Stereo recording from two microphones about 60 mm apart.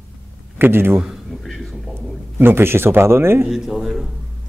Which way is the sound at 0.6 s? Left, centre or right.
Right.